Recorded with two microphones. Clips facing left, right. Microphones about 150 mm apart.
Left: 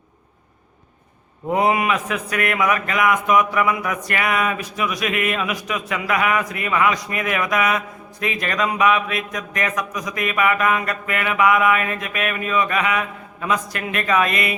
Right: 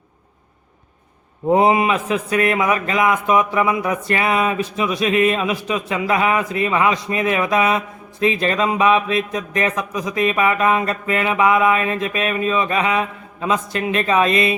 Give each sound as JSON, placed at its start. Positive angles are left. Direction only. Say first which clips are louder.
{"t": 1.5, "sound": "a man's voice", "louder": "right 4 dB", "side_deg": -25}